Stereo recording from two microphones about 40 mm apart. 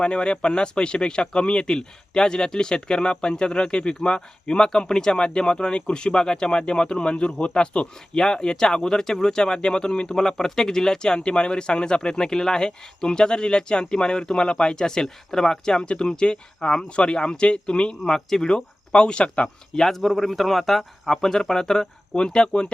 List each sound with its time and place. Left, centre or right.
0.0 s speech: left
18.0 s speech: centre; by 19.5 s left
19.7 s speech: centre